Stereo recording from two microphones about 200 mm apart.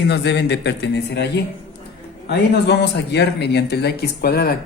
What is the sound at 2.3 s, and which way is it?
Speech, 55° left (ahead or behind).